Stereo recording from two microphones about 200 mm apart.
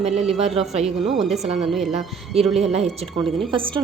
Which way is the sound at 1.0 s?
Centre (ahead or behind).